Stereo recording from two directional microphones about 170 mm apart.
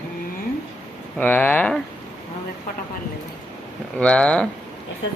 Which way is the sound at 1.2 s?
10° left (ahead or behind).